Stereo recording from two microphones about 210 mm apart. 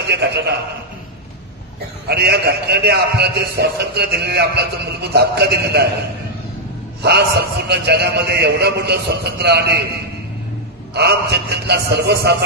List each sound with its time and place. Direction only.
0.0 s a man's voice: 55° right (ahead or behind)
2.0 s a man's voice: 50° right (ahead or behind)
7.0 s a man's voice: 55° right (ahead or behind)
11.0 s a man's voice: 50° right (ahead or behind)